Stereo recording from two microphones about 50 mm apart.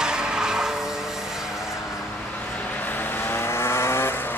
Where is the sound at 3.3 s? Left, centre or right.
Left.